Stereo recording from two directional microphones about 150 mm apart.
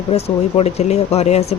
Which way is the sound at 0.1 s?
45° left (ahead or behind).